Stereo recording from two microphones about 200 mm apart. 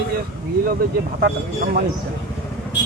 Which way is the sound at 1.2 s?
50° right (ahead or behind).